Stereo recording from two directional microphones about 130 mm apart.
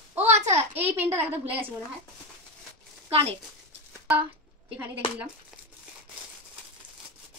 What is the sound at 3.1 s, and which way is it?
Speech, 50° right (ahead or behind).